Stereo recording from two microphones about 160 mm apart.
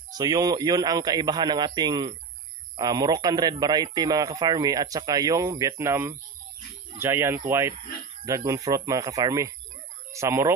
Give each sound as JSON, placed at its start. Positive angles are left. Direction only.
{"t": 0.1, "sound": "speech", "side_deg": -25}